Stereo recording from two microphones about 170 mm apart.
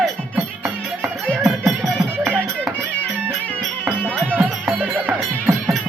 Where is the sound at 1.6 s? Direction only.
Centre (ahead or behind).